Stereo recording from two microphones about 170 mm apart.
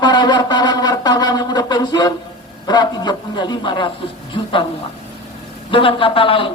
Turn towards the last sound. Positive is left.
turn(degrees=30)  # may be behind; listen again after turning